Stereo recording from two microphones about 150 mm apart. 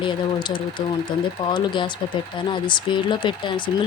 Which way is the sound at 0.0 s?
30° left (ahead or behind).